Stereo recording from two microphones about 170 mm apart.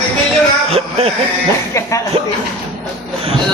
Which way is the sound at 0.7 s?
35° right (ahead or behind).